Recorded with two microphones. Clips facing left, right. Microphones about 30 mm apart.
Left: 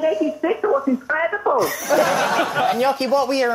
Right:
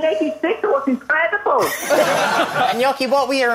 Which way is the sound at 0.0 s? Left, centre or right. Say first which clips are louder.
Right 1 dB; right.